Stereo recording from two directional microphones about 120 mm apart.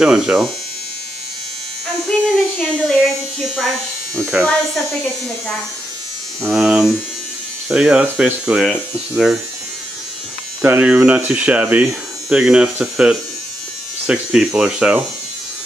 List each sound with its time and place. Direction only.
0.0 s speech: 5° right (ahead or behind)
2.0 s speech: 5° left (ahead or behind); by 4.5 s 10° right (ahead or behind)
6.4 s speech: 5° right (ahead or behind)
10.6 s speech: 15° right (ahead or behind)